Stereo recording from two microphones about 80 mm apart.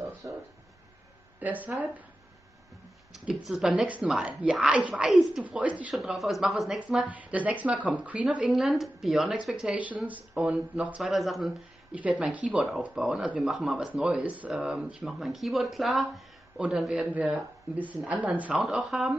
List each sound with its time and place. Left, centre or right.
0.2 s a sound: right
1.4 s speech: centre
3.1 s speech: centre
3.6 s speech: centre
5.9 s speech: centre
7.1 s speech: centre
8.5 s speech: centre
9.8 s speech: centre
11.0 s speech: centre
11.9 s speech: centre
14.0 s speech: centre
17.1 s speech: centre
18.9 s speech: centre